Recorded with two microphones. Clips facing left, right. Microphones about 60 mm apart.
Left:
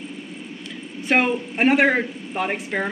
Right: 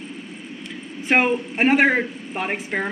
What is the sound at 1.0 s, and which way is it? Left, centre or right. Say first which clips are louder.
A man's voice: right 1 dB; centre.